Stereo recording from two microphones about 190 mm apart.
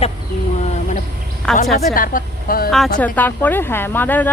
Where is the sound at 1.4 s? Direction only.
5° left (ahead or behind).